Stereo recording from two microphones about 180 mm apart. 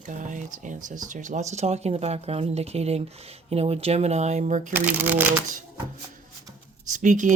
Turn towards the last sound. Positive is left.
turn(degrees=-45)  # may be behind; listen again after turning